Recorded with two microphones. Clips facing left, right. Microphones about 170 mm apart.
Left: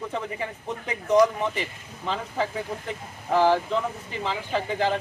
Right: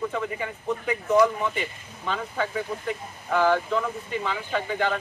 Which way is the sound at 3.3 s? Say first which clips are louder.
Left 1 dB; 30° left (ahead or behind).